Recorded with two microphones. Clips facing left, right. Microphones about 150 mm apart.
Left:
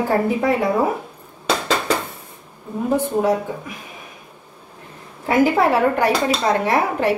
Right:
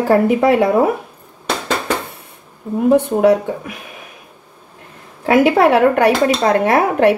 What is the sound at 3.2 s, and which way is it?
Speech, 70° right (ahead or behind).